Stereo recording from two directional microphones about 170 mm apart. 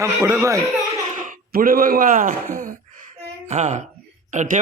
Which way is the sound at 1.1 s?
50° right (ahead or behind).